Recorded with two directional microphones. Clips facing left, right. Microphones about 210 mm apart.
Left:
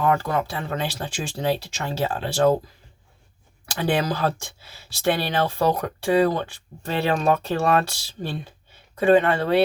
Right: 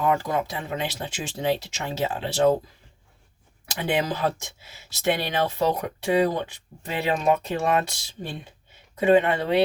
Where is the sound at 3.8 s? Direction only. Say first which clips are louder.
Left 2 dB; 20° right (ahead or behind).